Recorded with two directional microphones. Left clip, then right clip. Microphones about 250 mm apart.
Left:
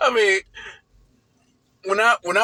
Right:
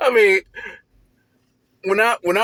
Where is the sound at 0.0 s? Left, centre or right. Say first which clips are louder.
Right 3 dB; right.